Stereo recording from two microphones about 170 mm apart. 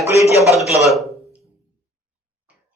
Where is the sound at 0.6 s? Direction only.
Centre (ahead or behind).